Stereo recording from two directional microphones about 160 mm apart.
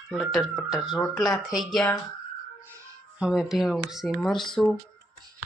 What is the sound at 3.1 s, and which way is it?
Speech, 5° right (ahead or behind).